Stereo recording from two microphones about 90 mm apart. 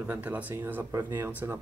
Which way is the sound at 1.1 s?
25° right (ahead or behind).